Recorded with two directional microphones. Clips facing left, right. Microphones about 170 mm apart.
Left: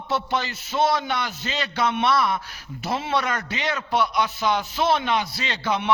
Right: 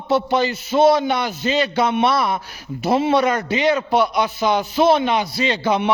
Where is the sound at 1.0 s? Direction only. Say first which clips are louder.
Right 7 dB; 15° right (ahead or behind).